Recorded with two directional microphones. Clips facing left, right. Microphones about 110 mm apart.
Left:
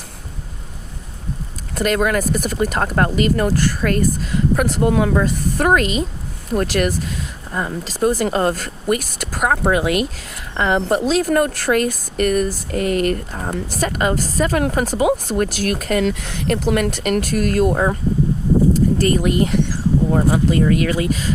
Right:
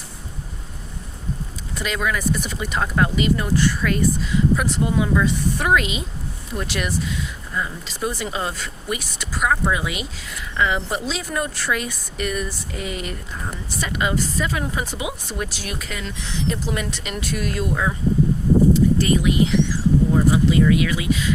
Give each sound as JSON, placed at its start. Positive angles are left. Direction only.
{"t": 1.7, "sound": "speech", "side_deg": 50}
{"t": 5.1, "sound": "speech", "side_deg": 45}